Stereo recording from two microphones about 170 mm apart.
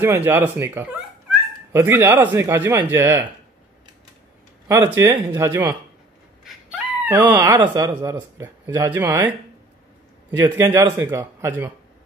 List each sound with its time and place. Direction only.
0.0 s speech: 15° right (ahead or behind)
4.9 s speech: 10° right (ahead or behind)
6.4 s a sound: 5° right (ahead or behind)
7.2 s speech: 10° right (ahead or behind)
10.3 s speech: 15° right (ahead or behind)